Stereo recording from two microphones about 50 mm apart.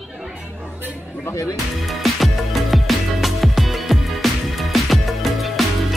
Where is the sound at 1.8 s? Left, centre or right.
Centre.